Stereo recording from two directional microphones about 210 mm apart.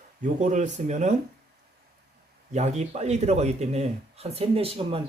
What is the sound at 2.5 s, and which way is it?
A man's voice, 35° right (ahead or behind).